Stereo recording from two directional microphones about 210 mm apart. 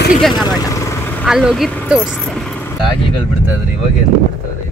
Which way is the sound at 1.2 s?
Centre (ahead or behind).